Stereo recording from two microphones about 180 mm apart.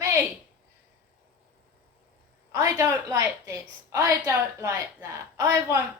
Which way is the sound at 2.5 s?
20° right (ahead or behind).